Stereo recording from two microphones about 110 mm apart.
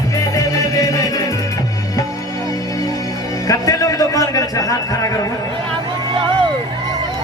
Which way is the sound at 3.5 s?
30° left (ahead or behind).